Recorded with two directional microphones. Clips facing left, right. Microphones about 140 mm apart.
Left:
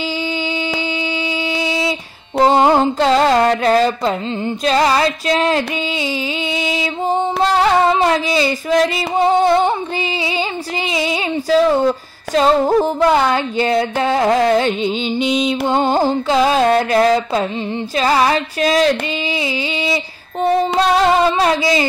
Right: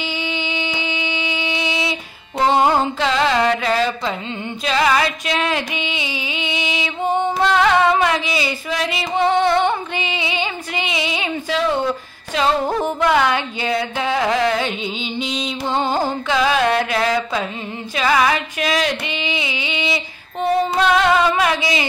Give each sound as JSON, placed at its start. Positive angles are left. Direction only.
{"t": 0.5, "sound": "a sound", "side_deg": 35}
{"t": 2.4, "sound": "carnatic music", "side_deg": 40}
{"t": 4.6, "sound": "female singing", "side_deg": 35}
{"t": 15.1, "sound": "music", "side_deg": 5}
{"t": 15.7, "sound": "carnatic music", "side_deg": 45}
{"t": 16.3, "sound": "female singing", "side_deg": 35}